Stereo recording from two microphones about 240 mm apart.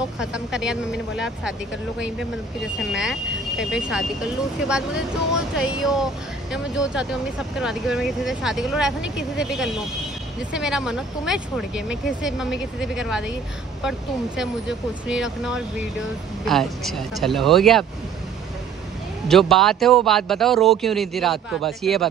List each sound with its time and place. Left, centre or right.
0.2 s speech: centre
19.2 s speech: centre